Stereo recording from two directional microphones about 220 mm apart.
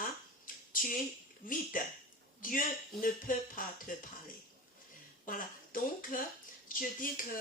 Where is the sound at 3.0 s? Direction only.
40° left (ahead or behind).